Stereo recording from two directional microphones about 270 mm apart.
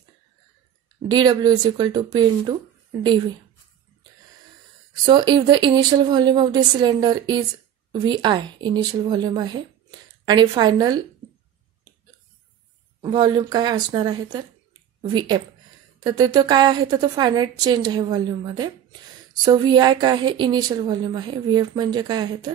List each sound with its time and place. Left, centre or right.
1.1 s a woman's voice: centre
5.0 s a woman's voice: centre
13.0 s a woman's voice: centre